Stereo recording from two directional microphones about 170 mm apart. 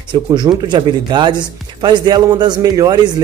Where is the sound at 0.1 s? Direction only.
25° right (ahead or behind).